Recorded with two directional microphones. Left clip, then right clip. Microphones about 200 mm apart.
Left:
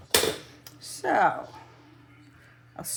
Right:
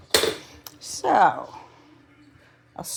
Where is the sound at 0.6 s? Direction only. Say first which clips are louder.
Right 5 dB; 25° right (ahead or behind).